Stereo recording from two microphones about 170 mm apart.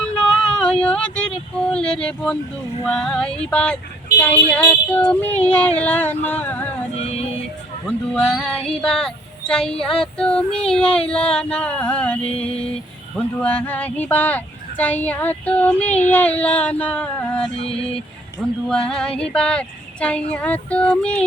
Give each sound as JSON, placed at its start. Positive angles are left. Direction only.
{"t": 0.0, "sound": "a sound", "side_deg": 5}
{"t": 2.8, "sound": "female singing", "side_deg": 5}
{"t": 4.2, "sound": "speech", "side_deg": 10}
{"t": 6.9, "sound": "a sound", "side_deg": 40}
{"t": 7.9, "sound": "female singing", "side_deg": 5}
{"t": 13.1, "sound": "speech", "side_deg": 10}
{"t": 18.7, "sound": "female singing", "side_deg": 5}